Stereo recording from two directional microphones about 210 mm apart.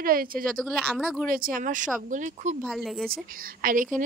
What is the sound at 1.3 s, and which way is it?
A woman's voice, 45° right (ahead or behind).